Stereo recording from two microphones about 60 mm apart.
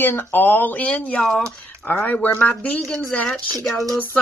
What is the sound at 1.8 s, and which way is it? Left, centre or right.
Speech, left.